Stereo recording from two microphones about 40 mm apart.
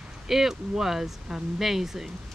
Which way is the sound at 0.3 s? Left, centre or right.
Centre.